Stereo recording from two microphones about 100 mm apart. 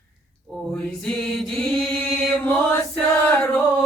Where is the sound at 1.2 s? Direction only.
10° left (ahead or behind).